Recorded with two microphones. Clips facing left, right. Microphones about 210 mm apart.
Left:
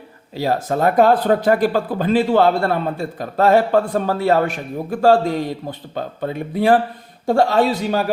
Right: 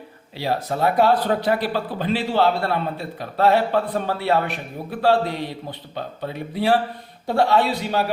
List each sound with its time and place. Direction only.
0.3 s speech: 45° left (ahead or behind)